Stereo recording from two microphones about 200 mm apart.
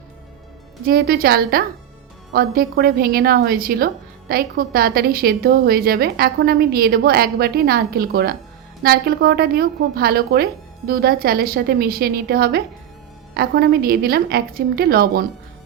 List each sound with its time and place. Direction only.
0.9 s a woman's voice: 50° right (ahead or behind)